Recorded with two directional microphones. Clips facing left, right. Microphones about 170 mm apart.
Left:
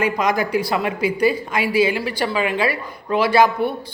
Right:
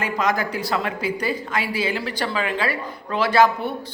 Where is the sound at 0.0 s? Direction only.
15° left (ahead or behind).